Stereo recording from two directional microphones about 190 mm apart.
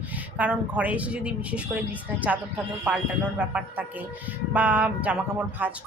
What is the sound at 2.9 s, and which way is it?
A woman's voice, 5° right (ahead or behind).